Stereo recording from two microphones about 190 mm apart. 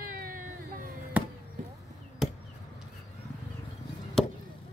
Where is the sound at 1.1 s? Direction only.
5° right (ahead or behind).